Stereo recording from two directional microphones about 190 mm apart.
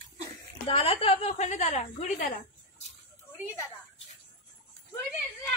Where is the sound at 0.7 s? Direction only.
30° left (ahead or behind).